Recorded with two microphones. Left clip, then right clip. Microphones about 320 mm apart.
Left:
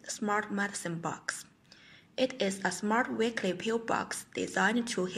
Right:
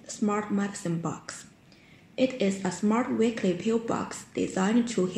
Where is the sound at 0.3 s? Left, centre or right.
Left.